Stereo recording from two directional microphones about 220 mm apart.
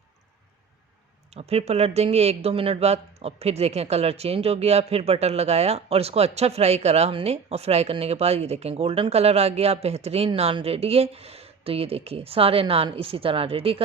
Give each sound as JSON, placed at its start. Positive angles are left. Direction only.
{"t": 1.3, "sound": "speech", "side_deg": -30}